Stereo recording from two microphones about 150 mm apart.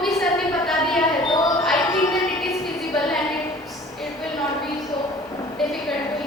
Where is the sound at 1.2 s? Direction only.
30° left (ahead or behind).